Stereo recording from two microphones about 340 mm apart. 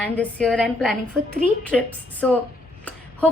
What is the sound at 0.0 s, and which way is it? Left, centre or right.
A woman's voice, centre.